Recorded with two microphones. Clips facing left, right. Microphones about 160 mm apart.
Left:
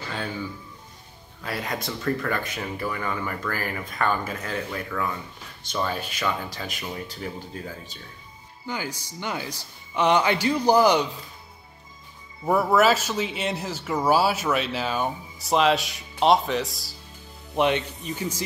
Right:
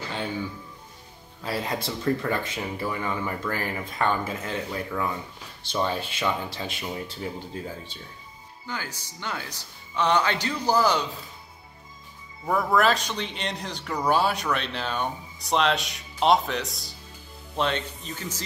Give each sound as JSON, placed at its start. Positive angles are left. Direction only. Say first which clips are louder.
{"t": 1.4, "sound": "speech", "louder": "right 1 dB", "side_deg": -30}
{"t": 8.6, "sound": "speech", "louder": "left 4 dB", "side_deg": 15}
{"t": 12.4, "sound": "speech", "louder": "left 3 dB", "side_deg": 10}
{"t": 17.6, "sound": "speech", "louder": "left 4 dB", "side_deg": 15}